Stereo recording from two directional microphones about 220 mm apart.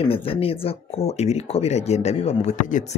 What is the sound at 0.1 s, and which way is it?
Speech, 25° left (ahead or behind).